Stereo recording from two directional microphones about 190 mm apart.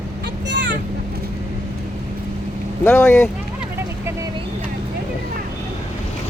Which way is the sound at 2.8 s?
10° left (ahead or behind).